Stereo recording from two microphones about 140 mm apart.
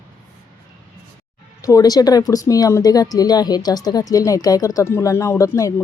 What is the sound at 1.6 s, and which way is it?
Speech, 25° left (ahead or behind).